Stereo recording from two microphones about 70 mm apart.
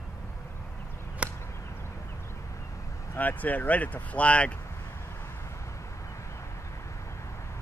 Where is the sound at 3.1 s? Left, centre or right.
Left.